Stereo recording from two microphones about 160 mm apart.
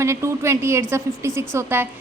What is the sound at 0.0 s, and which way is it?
A woman's voice, 15° right (ahead or behind).